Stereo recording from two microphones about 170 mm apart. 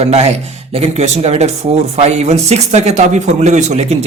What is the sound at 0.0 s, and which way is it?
Speech, 40° right (ahead or behind).